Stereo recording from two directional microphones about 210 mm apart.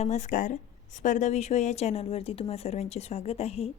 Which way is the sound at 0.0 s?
35° left (ahead or behind).